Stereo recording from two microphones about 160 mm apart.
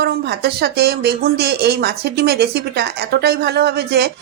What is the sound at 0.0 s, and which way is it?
Speech, 90° right.